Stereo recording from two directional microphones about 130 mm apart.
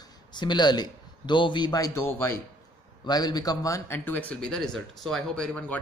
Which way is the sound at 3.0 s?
30° left (ahead or behind).